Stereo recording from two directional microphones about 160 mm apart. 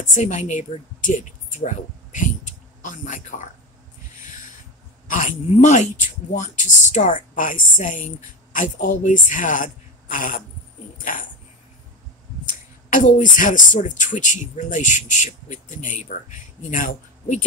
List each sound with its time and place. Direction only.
0.0 s speech: 50° left (ahead or behind)
2.1 s a sound: 55° left (ahead or behind)
5.0 s speech: 55° left (ahead or behind)
12.9 s speech: 55° left (ahead or behind)